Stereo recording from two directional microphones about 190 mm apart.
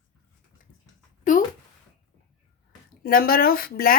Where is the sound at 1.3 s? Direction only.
45° left (ahead or behind).